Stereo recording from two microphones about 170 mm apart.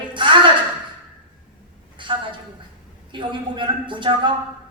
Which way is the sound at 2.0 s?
30° right (ahead or behind).